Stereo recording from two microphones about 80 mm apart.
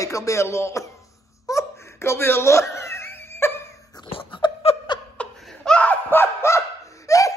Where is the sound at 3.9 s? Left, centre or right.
Left.